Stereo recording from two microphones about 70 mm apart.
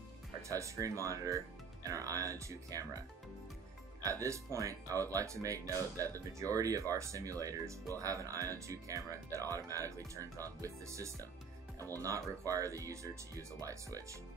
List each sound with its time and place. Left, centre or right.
0.5 s speech: right
4.0 s speech: right